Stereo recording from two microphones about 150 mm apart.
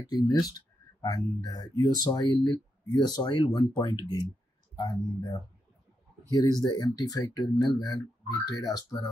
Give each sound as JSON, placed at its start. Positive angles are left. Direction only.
{"t": 0.1, "sound": "speech", "side_deg": 25}